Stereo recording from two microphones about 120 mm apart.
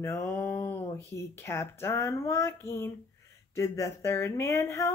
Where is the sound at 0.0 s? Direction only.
20° left (ahead or behind).